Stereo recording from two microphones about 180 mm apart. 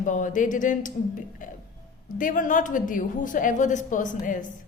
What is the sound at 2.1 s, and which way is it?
A woman's voice, 45° left (ahead or behind).